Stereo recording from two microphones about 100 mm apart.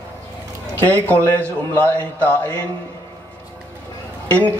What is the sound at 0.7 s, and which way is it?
A man's voice, 20° left (ahead or behind).